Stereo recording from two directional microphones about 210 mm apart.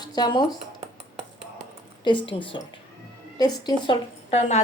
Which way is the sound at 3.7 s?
25° left (ahead or behind).